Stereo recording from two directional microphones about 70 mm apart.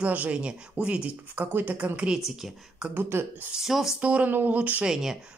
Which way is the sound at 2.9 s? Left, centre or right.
Right.